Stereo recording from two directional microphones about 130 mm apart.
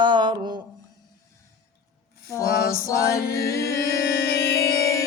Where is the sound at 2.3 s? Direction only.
25° left (ahead or behind).